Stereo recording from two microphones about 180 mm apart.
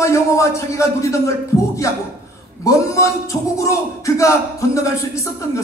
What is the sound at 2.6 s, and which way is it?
Speech, 15° left (ahead or behind).